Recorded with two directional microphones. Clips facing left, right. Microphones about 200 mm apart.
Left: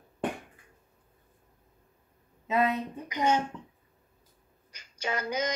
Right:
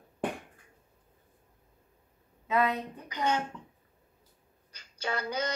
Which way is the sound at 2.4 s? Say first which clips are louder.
Left 1 dB; 25° left (ahead or behind).